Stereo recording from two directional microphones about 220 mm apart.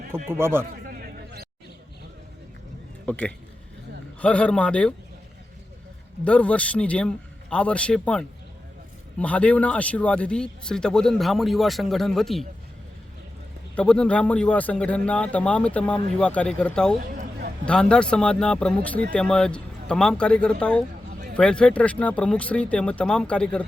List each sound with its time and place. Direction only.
0.3 s a man's voice: 10° right (ahead or behind)
0.9 s a sound: 40° right (ahead or behind)
3.1 s speech: 5° left (ahead or behind)
6.2 s speech: 5° left (ahead or behind)
13.7 s speech: 5° left (ahead or behind)